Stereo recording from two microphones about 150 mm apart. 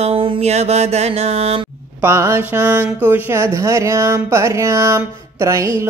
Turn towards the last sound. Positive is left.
turn(degrees=-20)  # may be behind; listen again after turning